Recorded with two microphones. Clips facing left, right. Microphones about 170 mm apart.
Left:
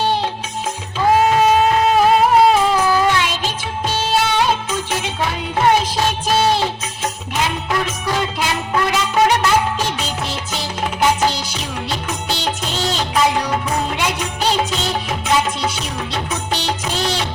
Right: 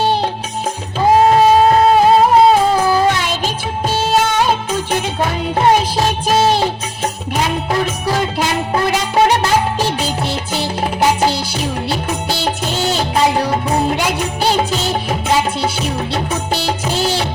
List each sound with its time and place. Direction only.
1.0 s music: 35° right (ahead or behind)
3.9 s music of bollywood: 50° right (ahead or behind)
4.9 s music: 50° right (ahead or behind)
8.7 s music: 30° right (ahead or behind)
12.7 s music: 5° right (ahead or behind)
13.1 s music: 30° right (ahead or behind)
16.9 s music: 5° right (ahead or behind)